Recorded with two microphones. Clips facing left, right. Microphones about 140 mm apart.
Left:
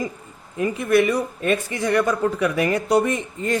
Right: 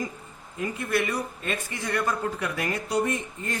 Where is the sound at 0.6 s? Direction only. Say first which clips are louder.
Left 9 dB; 80° left.